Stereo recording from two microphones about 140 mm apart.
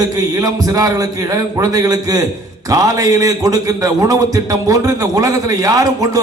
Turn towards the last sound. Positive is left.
turn(degrees=-25)  # may be behind; listen again after turning